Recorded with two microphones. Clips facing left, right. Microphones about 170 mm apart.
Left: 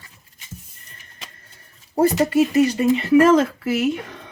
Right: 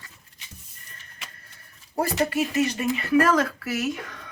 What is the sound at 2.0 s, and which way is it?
Speech, 30° left (ahead or behind).